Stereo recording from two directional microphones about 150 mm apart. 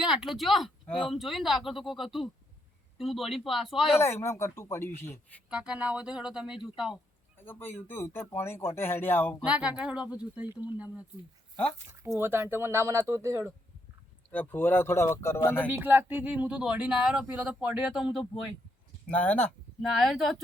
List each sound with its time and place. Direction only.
0.0 s speech: 5° right (ahead or behind)
3.9 s speech: 15° left (ahead or behind)
5.5 s speech: 5° right (ahead or behind)
7.3 s speech: 15° left (ahead or behind)
9.4 s speech: 10° right (ahead or behind)
11.9 s speech: 20° right (ahead or behind)
14.3 s speech: 10° left (ahead or behind)
15.6 s speech: 10° right (ahead or behind)
19.0 s speech: 10° left (ahead or behind)